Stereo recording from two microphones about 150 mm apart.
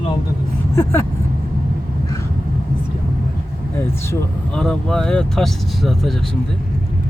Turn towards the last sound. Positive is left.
turn(degrees=0)  # may be behind; listen again after turning